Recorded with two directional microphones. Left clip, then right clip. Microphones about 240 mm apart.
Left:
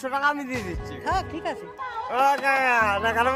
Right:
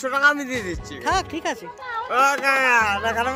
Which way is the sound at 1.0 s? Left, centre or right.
Right.